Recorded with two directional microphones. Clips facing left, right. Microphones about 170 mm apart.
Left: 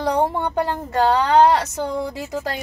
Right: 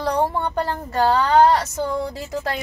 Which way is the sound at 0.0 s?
20° left (ahead or behind).